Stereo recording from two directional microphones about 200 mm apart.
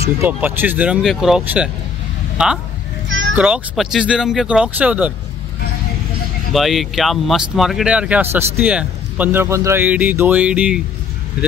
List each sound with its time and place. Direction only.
0.0 s speech: 10° right (ahead or behind)
3.1 s children playing: 70° right (ahead or behind)
3.3 s speech: 5° right (ahead or behind)
6.5 s speech: centre (ahead or behind)